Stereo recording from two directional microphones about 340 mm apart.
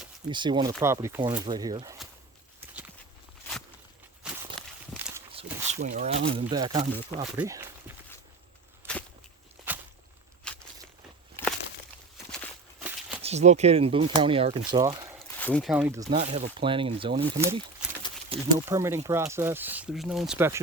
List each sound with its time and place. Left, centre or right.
0.3 s speech: centre
4.9 s walk: centre
5.3 s a sound: centre
6.4 s speech: centre
8.8 s whip: centre
9.7 s walk: centre
11.4 s a sound: centre
12.3 s walk: centre
13.2 s speech: centre
15.4 s speech: centre
18.3 s speech: centre